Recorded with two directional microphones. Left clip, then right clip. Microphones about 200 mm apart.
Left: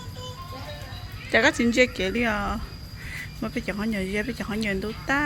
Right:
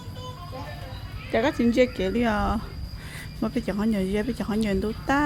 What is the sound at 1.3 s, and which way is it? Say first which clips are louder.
Speech: left 3 dB; 5° right (ahead or behind).